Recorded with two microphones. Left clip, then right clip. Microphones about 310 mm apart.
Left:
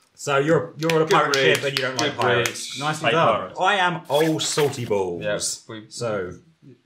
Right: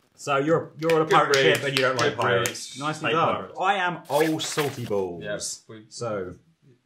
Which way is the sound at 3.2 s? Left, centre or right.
Right.